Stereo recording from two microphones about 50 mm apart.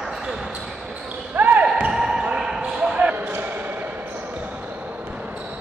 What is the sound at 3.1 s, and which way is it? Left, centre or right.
Basketball bounce, right.